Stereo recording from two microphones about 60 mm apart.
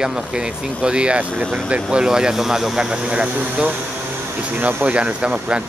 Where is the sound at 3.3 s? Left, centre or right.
Right.